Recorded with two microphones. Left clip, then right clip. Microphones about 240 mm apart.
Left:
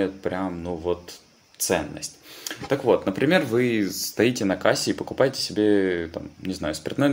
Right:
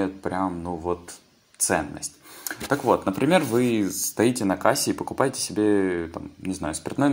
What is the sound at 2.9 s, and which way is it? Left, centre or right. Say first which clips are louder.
Speech: left 1 dB; centre.